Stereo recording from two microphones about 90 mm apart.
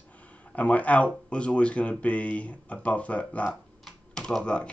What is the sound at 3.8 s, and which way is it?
Typing, 10° left (ahead or behind).